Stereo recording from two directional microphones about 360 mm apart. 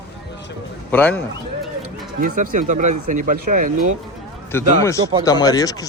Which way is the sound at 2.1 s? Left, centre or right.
Right.